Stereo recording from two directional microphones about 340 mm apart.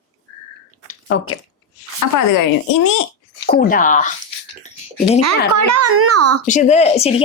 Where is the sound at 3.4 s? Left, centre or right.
Left.